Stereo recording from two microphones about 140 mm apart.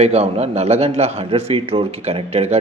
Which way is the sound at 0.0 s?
50° right (ahead or behind).